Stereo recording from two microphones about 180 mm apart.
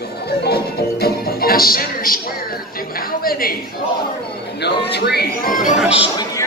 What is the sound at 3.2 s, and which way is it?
Music, 55° left (ahead or behind).